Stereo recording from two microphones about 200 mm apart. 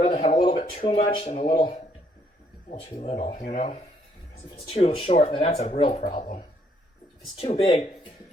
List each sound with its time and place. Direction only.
0.0 s speech: 30° left (ahead or behind)
3.0 s speech: 30° left (ahead or behind)
7.3 s speech: 30° left (ahead or behind)